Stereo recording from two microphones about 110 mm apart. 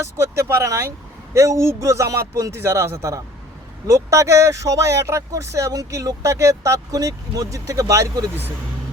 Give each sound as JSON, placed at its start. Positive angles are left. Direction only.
{"t": 0.0, "sound": "speech", "side_deg": -25}